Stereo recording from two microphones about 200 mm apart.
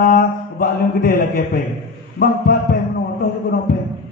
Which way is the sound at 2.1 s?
45° left (ahead or behind).